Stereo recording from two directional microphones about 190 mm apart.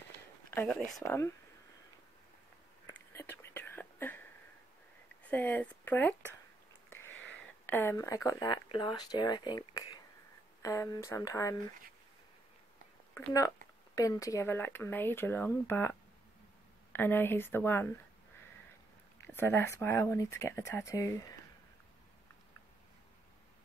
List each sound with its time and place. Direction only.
0.5 s a sound: 10° left (ahead or behind)
0.7 s speech: centre (ahead or behind)
2.9 s whispering: 10° left (ahead or behind)
5.3 s speech: 10° left (ahead or behind)
13.1 s speech: 15° left (ahead or behind)
19.2 s speech: 10° left (ahead or behind)